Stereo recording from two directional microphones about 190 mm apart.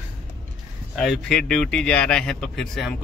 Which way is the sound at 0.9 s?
Centre (ahead or behind).